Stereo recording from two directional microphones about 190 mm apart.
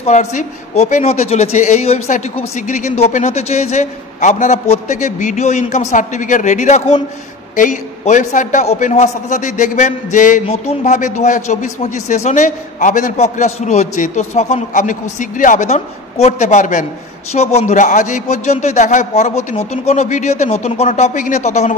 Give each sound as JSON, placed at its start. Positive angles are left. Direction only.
{"t": 0.0, "sound": "a man's voice", "side_deg": 35}